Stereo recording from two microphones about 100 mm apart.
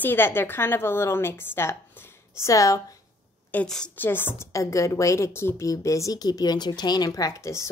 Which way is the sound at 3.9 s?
20° left (ahead or behind).